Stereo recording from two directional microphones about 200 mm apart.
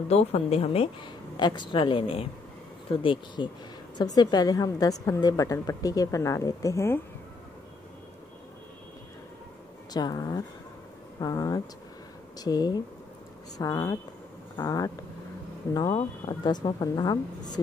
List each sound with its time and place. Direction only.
0.1 s a woman's voice: 30° left (ahead or behind); by 7.0 s 15° left (ahead or behind)
9.9 s a woman's voice: 20° left (ahead or behind)